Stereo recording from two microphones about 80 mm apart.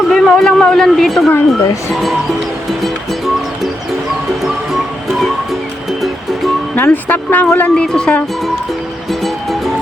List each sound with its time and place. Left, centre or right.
0.1 s a sound: centre
6.7 s a woman's voice: left
7.9 s speech: centre